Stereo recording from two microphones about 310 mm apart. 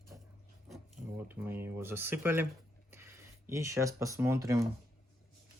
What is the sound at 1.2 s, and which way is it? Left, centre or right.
Speech, centre.